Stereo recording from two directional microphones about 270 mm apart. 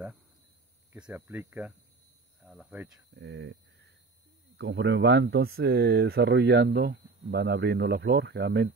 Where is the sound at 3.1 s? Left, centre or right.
Right.